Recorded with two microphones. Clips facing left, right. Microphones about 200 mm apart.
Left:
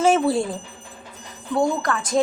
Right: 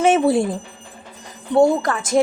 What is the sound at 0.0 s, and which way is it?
Speech, 20° right (ahead or behind).